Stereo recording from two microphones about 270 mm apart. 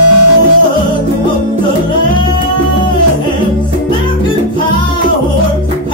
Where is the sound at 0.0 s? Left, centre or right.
Left.